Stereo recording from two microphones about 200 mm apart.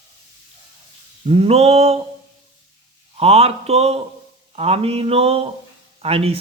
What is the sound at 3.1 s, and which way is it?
Speech, 30° right (ahead or behind).